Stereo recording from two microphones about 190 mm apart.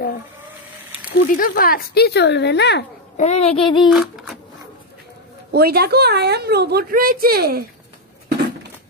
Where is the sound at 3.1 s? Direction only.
35° left (ahead or behind).